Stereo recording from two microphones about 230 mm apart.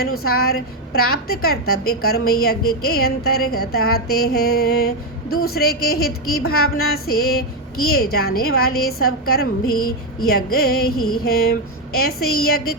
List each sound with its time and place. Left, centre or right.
0.2 s a woman's voice: left
10.9 s mantra: left
11.2 s a woman's voice: left